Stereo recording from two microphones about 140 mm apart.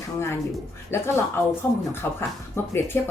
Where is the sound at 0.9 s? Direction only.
20° left (ahead or behind).